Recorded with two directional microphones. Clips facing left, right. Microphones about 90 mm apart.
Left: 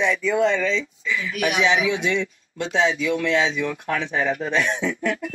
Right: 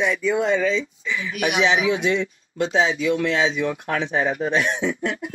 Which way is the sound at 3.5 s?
20° right (ahead or behind).